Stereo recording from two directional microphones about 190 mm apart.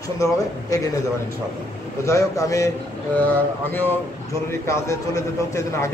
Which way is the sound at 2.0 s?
15° left (ahead or behind).